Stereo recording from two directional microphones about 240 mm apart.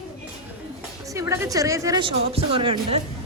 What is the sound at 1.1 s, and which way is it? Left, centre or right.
Speech, centre.